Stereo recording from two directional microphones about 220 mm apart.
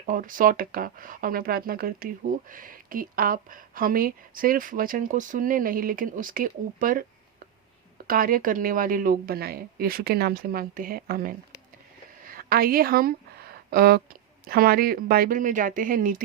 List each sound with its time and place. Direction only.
0.0 s speech: 40° right (ahead or behind)
8.0 s speech: 40° right (ahead or behind)